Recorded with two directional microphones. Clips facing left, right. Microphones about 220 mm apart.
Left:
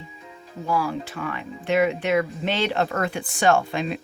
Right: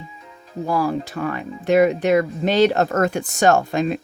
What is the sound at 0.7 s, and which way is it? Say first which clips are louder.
Speech: right 4 dB; 40° right (ahead or behind).